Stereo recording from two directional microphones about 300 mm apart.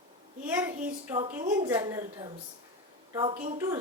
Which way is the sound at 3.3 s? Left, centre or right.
Right.